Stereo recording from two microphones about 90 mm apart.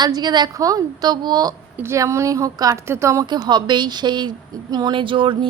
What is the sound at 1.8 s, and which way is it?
Speech, 30° right (ahead or behind).